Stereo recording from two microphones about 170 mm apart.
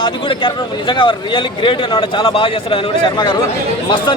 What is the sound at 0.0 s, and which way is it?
A man's voice, 30° left (ahead or behind).